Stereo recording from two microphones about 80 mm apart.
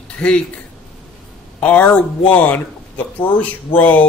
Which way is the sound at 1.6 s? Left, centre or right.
Centre.